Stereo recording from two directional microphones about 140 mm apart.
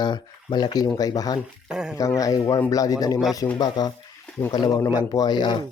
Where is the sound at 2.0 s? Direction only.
25° left (ahead or behind).